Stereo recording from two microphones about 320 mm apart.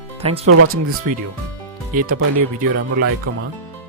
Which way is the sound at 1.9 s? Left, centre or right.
Right.